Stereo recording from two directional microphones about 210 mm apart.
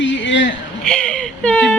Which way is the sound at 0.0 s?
60° left (ahead or behind).